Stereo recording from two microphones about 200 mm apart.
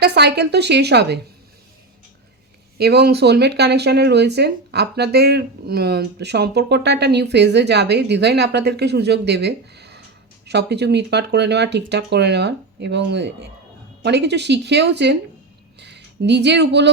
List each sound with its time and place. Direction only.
0.0 s speech: 55° right (ahead or behind)
2.7 s speech: 55° right (ahead or behind)